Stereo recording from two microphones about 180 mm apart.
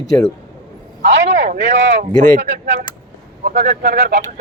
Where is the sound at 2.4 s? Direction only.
70° right (ahead or behind).